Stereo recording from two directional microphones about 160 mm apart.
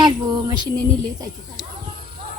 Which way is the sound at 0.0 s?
25° right (ahead or behind).